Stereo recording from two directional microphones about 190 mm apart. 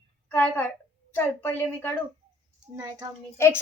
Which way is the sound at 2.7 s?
15° right (ahead or behind).